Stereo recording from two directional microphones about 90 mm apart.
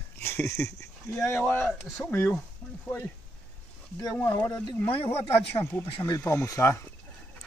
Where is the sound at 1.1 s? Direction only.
30° left (ahead or behind).